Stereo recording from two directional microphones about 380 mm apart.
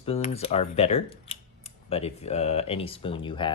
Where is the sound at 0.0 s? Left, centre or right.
Centre.